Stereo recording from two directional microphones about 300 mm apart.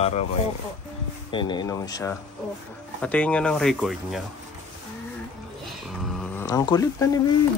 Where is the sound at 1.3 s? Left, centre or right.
Centre.